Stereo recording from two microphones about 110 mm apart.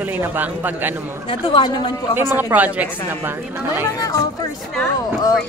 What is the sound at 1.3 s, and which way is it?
Speech, 45° left (ahead or behind).